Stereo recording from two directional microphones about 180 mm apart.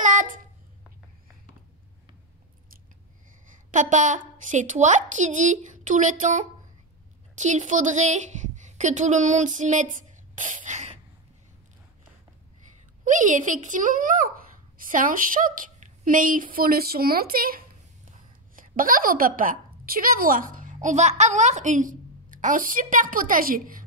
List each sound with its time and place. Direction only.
0.0 s child singing: 45° right (ahead or behind)
3.7 s a woman's voice: 45° right (ahead or behind)
13.0 s a woman's voice: 45° right (ahead or behind)